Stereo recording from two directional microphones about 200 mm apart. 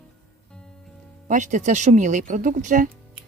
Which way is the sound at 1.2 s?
40° right (ahead or behind).